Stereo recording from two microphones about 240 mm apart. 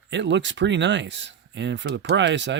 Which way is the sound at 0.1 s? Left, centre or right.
Right.